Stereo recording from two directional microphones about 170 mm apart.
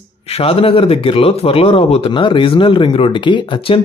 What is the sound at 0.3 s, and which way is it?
Speech, 35° left (ahead or behind).